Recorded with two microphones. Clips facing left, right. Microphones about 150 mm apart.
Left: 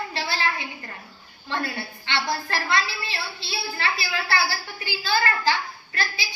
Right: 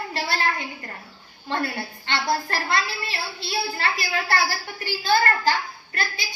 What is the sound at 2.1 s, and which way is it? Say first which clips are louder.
A woman's voice: right 2 dB; 45° right (ahead or behind).